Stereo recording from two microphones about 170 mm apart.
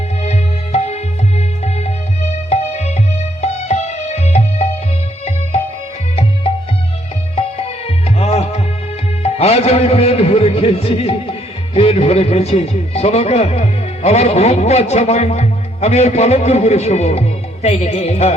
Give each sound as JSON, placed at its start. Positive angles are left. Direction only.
{"t": 0.2, "sound": "music", "side_deg": 40}
{"t": 7.3, "sound": "music", "side_deg": 35}
{"t": 9.2, "sound": "a man's voice", "side_deg": 40}